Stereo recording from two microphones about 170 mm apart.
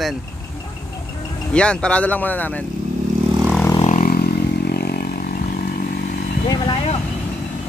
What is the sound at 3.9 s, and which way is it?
Vehicle, 55° left (ahead or behind).